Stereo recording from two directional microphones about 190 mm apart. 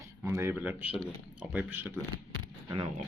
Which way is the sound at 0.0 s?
15° right (ahead or behind).